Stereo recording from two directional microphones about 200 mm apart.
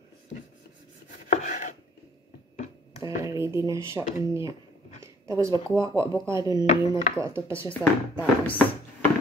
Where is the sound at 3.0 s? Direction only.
15° right (ahead or behind).